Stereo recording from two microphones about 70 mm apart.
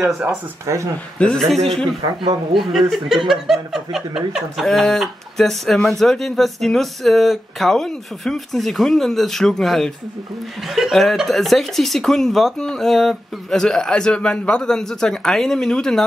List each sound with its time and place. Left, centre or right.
0.7 s speech: right
1.2 s speech: centre
4.6 s speech: centre